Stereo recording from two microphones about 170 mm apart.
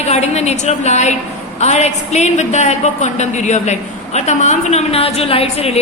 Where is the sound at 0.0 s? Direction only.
40° left (ahead or behind).